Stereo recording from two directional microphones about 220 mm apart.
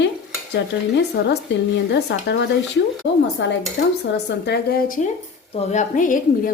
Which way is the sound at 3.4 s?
55° left (ahead or behind).